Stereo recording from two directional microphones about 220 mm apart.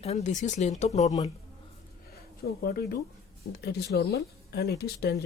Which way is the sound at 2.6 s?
45° left (ahead or behind).